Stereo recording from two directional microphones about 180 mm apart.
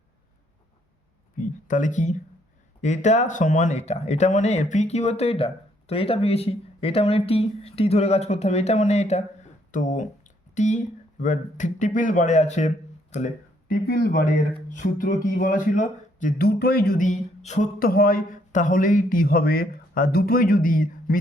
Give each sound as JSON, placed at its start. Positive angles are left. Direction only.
{"t": 1.4, "sound": "speech", "side_deg": 45}
{"t": 13.7, "sound": "speech", "side_deg": 55}
{"t": 14.7, "sound": "music", "side_deg": 45}
{"t": 15.3, "sound": "speech", "side_deg": 50}
{"t": 17.7, "sound": "speech", "side_deg": 55}